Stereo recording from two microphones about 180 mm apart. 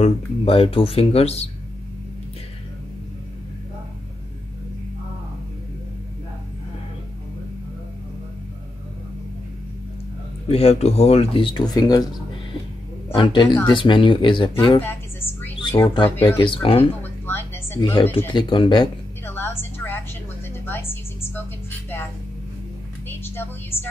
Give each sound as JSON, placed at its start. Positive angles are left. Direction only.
{"t": 0.0, "sound": "speech", "side_deg": 30}
{"t": 10.5, "sound": "speech", "side_deg": 35}
{"t": 13.1, "sound": "speech", "side_deg": 25}
{"t": 14.8, "sound": "music", "side_deg": 10}
{"t": 15.8, "sound": "speech", "side_deg": 25}
{"t": 17.0, "sound": "a sound", "side_deg": 10}
{"t": 18.3, "sound": "speech", "side_deg": 25}
{"t": 19.2, "sound": "a sound", "side_deg": 10}
{"t": 23.0, "sound": "a sound", "side_deg": 10}